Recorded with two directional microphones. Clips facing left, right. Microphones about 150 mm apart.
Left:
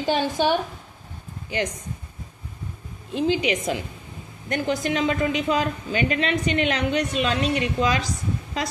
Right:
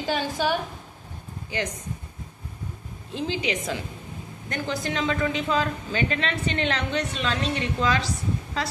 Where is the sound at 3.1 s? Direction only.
15° left (ahead or behind).